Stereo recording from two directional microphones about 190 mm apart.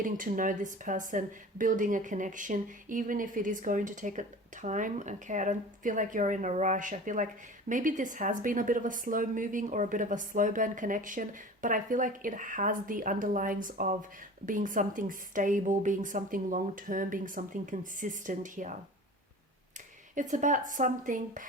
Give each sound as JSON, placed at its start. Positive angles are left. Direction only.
{"t": 0.0, "sound": "speech", "side_deg": -45}
{"t": 20.1, "sound": "speech", "side_deg": -40}